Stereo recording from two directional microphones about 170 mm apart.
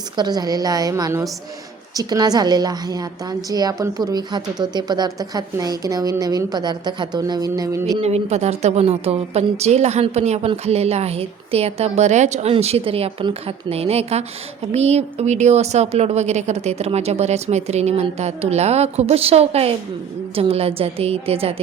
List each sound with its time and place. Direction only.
0.2 s a woman's voice: 25° right (ahead or behind)
8.0 s a woman's voice: 40° right (ahead or behind)